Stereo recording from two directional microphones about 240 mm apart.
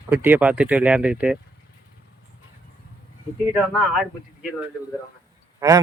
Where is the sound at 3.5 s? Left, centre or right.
Centre.